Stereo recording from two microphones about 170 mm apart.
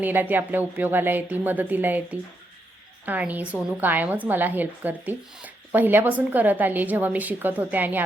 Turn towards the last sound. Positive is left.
turn(degrees=-10)  # may be behind; listen again after turning